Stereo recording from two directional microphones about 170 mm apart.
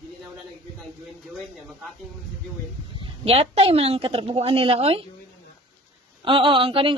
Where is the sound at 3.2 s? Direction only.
35° right (ahead or behind).